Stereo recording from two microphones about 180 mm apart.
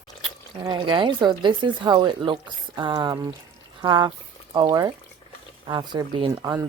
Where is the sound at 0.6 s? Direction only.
25° right (ahead or behind).